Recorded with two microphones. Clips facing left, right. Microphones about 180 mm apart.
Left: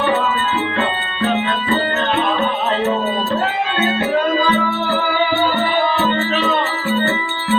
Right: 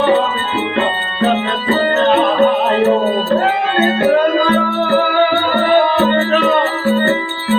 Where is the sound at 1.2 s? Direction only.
40° right (ahead or behind).